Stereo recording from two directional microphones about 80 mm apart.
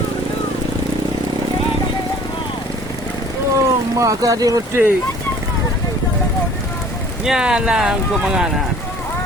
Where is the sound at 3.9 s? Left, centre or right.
Right.